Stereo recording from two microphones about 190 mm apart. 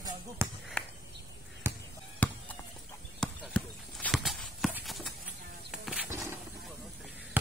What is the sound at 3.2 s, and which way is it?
Clip-clop, 5° left (ahead or behind).